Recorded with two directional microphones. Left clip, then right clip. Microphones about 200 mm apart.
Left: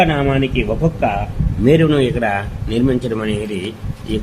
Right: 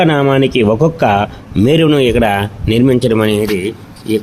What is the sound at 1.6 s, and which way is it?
Speech, 45° right (ahead or behind).